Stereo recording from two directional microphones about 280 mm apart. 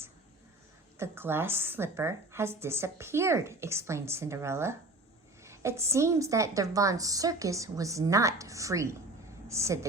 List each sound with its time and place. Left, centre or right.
0.9 s a woman's voice: centre